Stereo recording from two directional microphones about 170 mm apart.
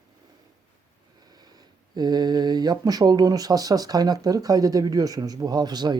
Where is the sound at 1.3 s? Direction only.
25° right (ahead or behind).